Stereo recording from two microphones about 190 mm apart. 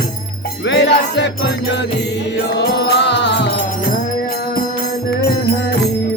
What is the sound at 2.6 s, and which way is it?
Music, 60° left (ahead or behind).